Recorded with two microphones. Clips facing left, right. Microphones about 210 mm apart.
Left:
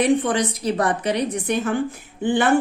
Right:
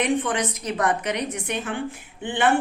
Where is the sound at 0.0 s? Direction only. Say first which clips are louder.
Left 4 dB; 35° left (ahead or behind).